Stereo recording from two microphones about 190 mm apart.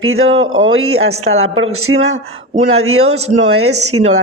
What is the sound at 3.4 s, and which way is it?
Speech, 90° right.